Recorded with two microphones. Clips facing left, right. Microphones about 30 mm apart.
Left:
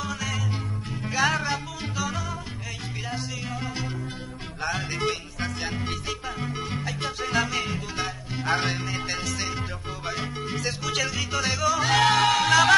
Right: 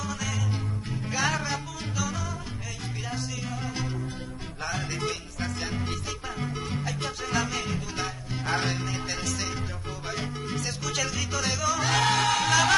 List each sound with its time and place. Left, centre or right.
0.0 s music: left